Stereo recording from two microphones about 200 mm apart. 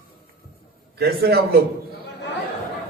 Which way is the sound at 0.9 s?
50° right (ahead or behind).